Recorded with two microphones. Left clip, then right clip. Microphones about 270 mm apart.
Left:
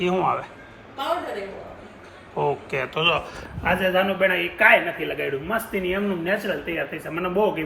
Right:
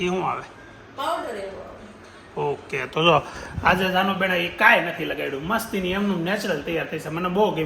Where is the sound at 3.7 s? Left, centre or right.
Centre.